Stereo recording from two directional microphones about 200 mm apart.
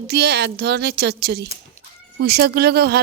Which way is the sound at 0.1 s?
55° right (ahead or behind).